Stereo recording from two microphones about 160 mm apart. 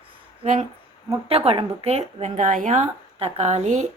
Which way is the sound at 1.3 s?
40° right (ahead or behind).